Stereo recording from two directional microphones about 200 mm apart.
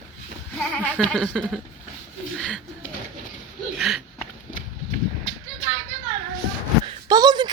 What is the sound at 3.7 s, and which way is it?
Speech, centre (ahead or behind).